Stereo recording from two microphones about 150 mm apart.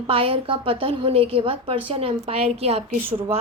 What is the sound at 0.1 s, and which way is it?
A woman's voice, 40° right (ahead or behind).